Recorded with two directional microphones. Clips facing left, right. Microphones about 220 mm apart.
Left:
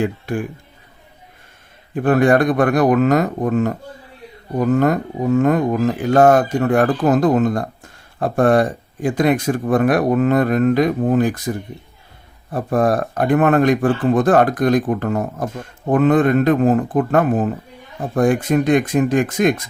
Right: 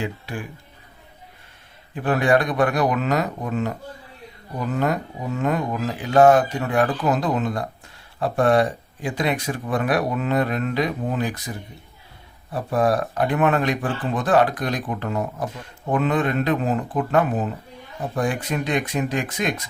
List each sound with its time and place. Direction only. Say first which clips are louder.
0.0 s speech: left 8 dB; 50° left (ahead or behind)
2.0 s speech: left 6 dB; 50° left (ahead or behind)